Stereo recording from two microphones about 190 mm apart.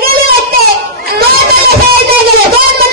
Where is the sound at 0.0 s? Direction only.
50° right (ahead or behind).